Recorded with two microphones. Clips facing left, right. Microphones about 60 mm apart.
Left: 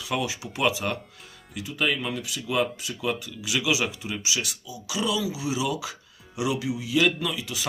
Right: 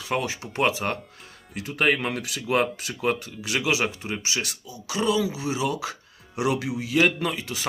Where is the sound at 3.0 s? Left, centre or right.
Right.